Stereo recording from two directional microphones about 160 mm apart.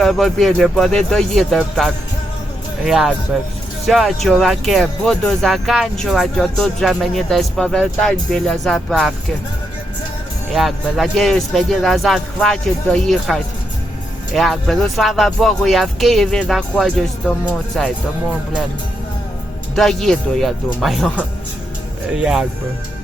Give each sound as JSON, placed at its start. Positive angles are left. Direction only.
{"t": 0.0, "sound": "speech", "side_deg": 0}
{"t": 10.5, "sound": "speech", "side_deg": 0}
{"t": 19.7, "sound": "speech", "side_deg": 0}